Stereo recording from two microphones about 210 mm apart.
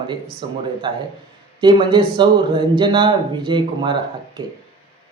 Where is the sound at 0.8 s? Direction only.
25° right (ahead or behind).